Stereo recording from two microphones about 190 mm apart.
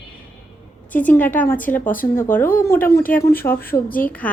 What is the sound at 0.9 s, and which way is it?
A woman's voice, 10° left (ahead or behind).